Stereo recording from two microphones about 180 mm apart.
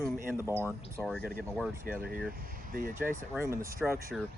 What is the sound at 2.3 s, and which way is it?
Speech, 50° right (ahead or behind).